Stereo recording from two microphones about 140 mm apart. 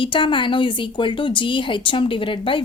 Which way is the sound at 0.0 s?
35° left (ahead or behind).